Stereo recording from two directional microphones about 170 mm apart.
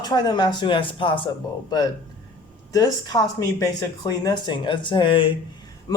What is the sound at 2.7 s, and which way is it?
Speech, 20° left (ahead or behind).